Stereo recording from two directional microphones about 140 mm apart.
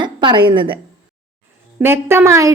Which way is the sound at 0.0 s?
35° right (ahead or behind).